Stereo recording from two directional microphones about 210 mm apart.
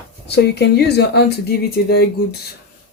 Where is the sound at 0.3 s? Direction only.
55° left (ahead or behind).